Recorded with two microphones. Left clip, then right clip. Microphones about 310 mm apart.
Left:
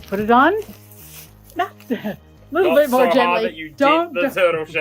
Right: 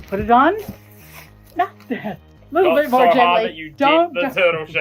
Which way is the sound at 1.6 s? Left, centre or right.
Left.